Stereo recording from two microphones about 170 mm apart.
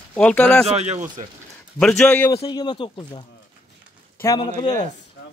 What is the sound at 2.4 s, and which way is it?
Speech, 25° left (ahead or behind).